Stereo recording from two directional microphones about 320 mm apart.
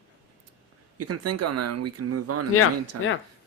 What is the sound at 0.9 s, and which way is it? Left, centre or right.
Speech, right.